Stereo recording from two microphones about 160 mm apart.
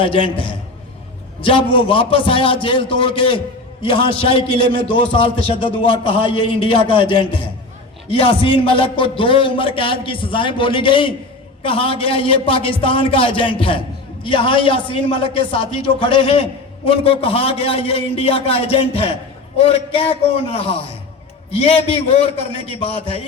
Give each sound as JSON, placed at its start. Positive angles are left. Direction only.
{"t": 0.0, "sound": "a man's voice", "side_deg": 30}
{"t": 1.5, "sound": "a man's voice", "side_deg": 30}